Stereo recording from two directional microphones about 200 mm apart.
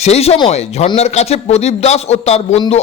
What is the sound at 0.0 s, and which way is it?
A man's voice, 30° left (ahead or behind).